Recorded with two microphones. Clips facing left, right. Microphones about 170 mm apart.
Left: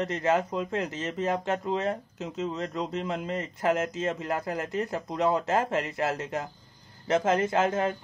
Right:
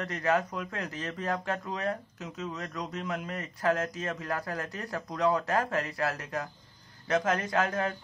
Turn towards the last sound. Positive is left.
turn(degrees=25)  # may be behind; listen again after turning